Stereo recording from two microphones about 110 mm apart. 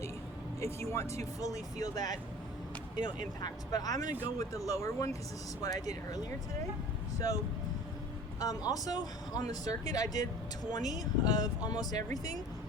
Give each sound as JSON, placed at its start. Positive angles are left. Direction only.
{"t": 0.6, "sound": "speech", "side_deg": 25}
{"t": 1.8, "sound": "speech", "side_deg": 35}
{"t": 8.4, "sound": "speech", "side_deg": 35}